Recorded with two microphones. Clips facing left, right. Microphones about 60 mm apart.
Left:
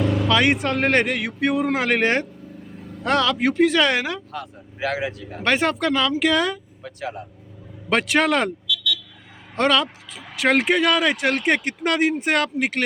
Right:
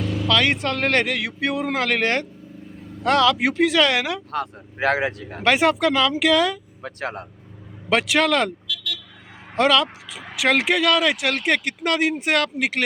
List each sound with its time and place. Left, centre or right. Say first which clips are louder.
0.0 s vehicle: left 5 dB; left
0.3 s speech: right 1 dB; centre
4.3 s speech: right 6 dB; right
5.4 s speech: right 3 dB; centre
6.8 s speech: right 2 dB; right
7.9 s speech: even; centre
8.6 s vehicle: left 5 dB; right
9.6 s speech: right 1 dB; centre